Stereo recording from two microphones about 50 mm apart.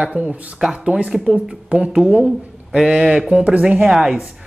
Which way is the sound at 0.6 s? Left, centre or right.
Centre.